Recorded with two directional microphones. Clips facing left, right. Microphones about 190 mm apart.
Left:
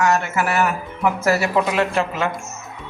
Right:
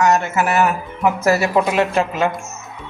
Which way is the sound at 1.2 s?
15° right (ahead or behind).